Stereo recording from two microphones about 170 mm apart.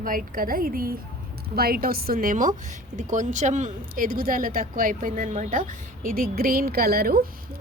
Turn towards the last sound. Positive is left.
turn(degrees=-65)  # may be behind; listen again after turning